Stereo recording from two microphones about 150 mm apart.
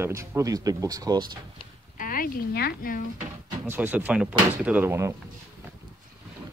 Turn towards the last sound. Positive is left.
turn(degrees=-15)  # may be behind; listen again after turning